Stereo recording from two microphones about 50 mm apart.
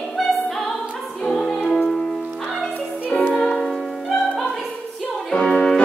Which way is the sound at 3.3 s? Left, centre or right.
Centre.